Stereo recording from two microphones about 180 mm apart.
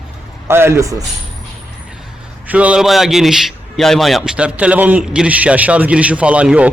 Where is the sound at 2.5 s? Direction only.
5° right (ahead or behind).